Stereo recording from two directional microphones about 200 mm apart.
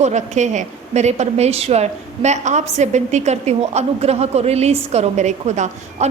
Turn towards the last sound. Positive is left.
turn(degrees=-35)  # may be behind; listen again after turning